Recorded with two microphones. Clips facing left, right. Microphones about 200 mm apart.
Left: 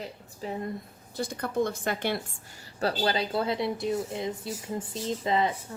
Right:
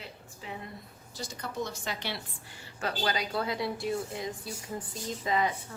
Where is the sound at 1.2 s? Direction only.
55° left (ahead or behind).